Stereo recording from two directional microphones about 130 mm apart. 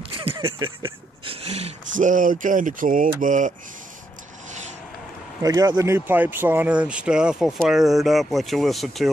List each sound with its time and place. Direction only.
0.1 s a sound: 45° right (ahead or behind)
2.0 s speech: 90° right
5.4 s speech: 30° right (ahead or behind); by 9.1 s centre (ahead or behind)